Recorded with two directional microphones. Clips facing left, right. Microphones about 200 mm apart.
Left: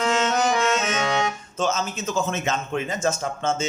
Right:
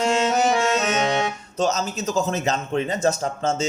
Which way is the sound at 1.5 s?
40° right (ahead or behind).